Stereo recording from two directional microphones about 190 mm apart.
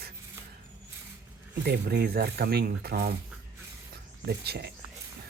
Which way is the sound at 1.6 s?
60° right (ahead or behind).